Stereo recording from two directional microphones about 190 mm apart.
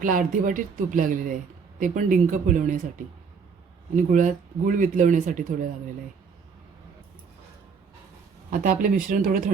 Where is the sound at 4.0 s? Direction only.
40° right (ahead or behind).